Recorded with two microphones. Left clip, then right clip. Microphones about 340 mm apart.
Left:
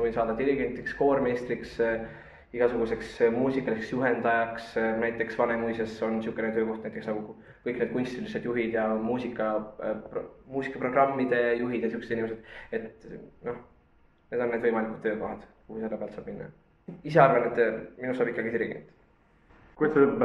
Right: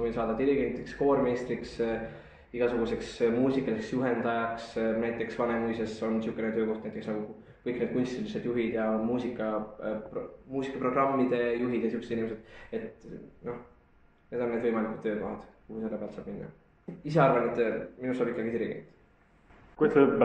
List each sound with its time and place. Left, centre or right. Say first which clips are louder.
0.0 s speech: left 2 dB; left
14.3 s speech: left 3 dB; left
17.0 s speech: left 4 dB; left
19.8 s a man's voice: even; centre